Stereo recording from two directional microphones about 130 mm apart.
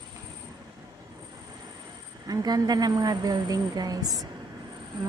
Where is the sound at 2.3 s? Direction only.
30° right (ahead or behind).